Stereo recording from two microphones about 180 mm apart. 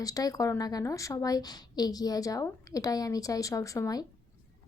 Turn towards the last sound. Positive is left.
turn(degrees=20)  # may be behind; listen again after turning